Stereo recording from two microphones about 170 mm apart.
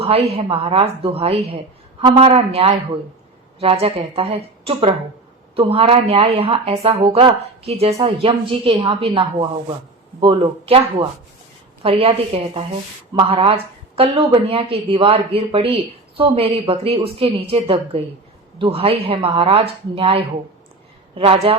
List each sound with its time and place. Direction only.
0.0 s a woman's voice: 35° right (ahead or behind)